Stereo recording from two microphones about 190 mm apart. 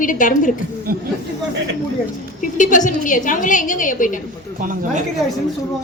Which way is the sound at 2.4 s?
45° left (ahead or behind).